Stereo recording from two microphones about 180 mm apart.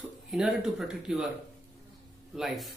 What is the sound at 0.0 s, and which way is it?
Speech, centre (ahead or behind).